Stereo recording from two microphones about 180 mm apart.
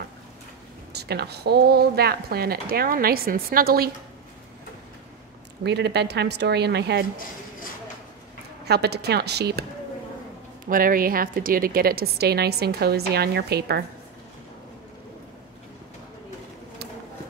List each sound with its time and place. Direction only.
0.9 s a woman's voice: 65° right (ahead or behind)
5.6 s a woman's voice: 70° right (ahead or behind)
8.6 s a woman's voice: 65° right (ahead or behind)
10.6 s a woman's voice: 50° right (ahead or behind)